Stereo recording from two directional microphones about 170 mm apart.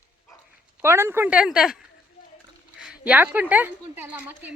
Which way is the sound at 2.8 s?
5° right (ahead or behind).